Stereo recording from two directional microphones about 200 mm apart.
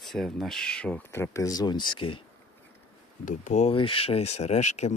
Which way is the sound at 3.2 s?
35° left (ahead or behind).